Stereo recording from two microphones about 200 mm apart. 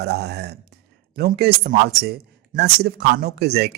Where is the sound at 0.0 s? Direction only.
55° right (ahead or behind).